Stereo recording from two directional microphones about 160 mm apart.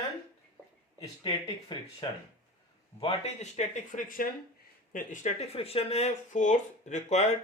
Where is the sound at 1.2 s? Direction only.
30° left (ahead or behind).